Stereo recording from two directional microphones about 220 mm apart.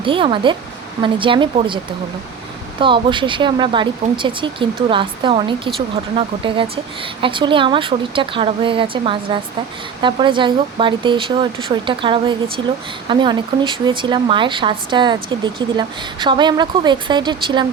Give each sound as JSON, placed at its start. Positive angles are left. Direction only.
{"t": 0.0, "sound": "speech", "side_deg": -25}
{"t": 2.8, "sound": "speech", "side_deg": -20}